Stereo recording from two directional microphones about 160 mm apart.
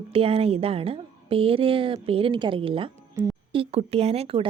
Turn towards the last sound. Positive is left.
turn(degrees=-40)  # may be behind; listen again after turning